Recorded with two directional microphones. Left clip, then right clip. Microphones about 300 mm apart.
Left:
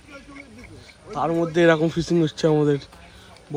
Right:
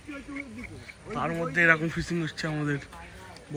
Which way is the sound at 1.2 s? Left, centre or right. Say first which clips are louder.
Left 6 dB; centre.